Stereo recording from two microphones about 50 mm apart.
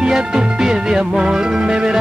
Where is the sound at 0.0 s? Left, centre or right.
Centre.